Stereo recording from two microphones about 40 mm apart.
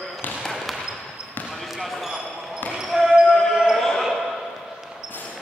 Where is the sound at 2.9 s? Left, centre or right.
Centre.